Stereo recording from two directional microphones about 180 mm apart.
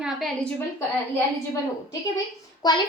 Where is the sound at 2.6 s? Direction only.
20° left (ahead or behind).